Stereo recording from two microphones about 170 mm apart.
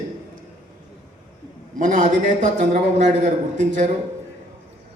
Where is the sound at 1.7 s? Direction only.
50° right (ahead or behind).